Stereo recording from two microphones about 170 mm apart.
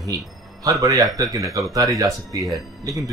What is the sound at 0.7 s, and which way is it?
Speech, 20° right (ahead or behind).